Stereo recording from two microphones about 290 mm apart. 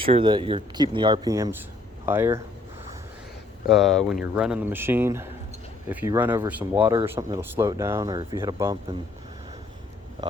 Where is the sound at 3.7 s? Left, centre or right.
Centre.